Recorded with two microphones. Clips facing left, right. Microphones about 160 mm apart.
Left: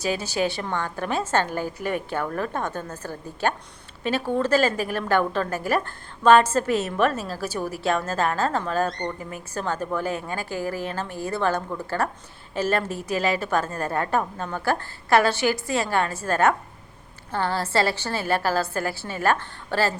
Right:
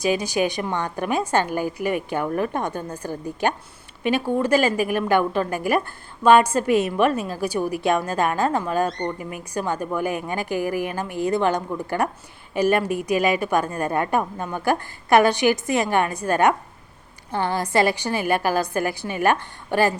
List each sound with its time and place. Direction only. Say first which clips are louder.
0.0 s a woman's voice: right 3 dB; 15° right (ahead or behind)